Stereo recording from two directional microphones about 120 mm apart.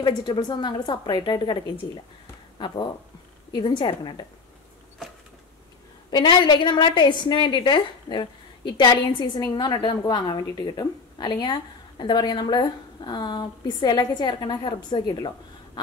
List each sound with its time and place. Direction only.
0.0 s a woman's voice: 40° left (ahead or behind)
3.5 s a woman's voice: 40° left (ahead or behind)
6.0 s a woman's voice: 40° left (ahead or behind)